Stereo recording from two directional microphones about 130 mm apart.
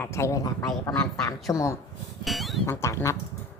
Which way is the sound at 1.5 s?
25° left (ahead or behind).